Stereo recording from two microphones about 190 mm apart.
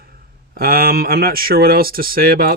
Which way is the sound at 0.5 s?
50° right (ahead or behind).